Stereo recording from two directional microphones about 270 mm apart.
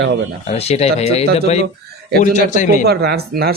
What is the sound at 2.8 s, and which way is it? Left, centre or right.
Speech, right.